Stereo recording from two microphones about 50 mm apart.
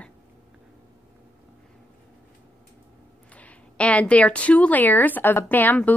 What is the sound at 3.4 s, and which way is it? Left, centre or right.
A woman's voice, left.